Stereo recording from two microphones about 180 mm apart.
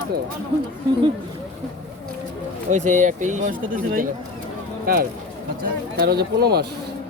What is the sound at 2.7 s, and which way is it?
Speech, 40° right (ahead or behind).